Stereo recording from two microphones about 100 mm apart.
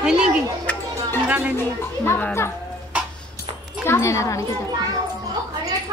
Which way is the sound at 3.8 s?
30° left (ahead or behind).